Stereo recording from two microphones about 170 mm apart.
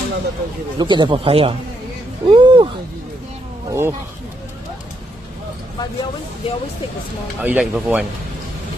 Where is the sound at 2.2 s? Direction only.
30° right (ahead or behind).